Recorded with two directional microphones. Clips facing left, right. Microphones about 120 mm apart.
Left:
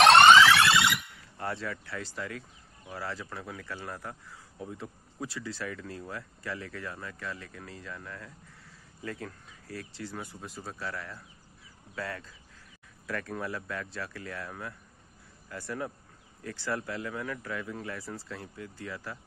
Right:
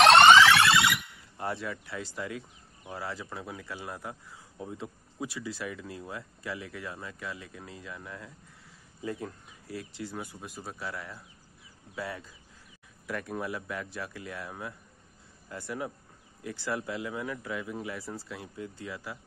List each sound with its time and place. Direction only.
0.0 s siren: centre (ahead or behind)
1.4 s speech: 20° right (ahead or behind)